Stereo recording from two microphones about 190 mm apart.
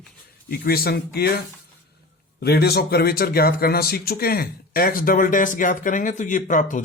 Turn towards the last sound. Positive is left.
turn(degrees=40)  # may be behind; listen again after turning